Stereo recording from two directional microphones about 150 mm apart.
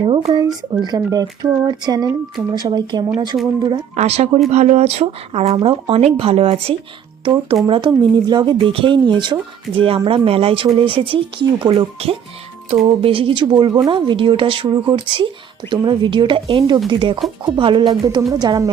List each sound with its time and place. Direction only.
0.0 s speech: 40° right (ahead or behind)
0.3 s speech: 25° right (ahead or behind)
3.9 s speech: 45° right (ahead or behind); by 18.7 s 25° right (ahead or behind)